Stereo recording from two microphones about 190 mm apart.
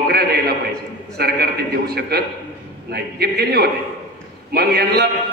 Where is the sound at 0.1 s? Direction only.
55° right (ahead or behind).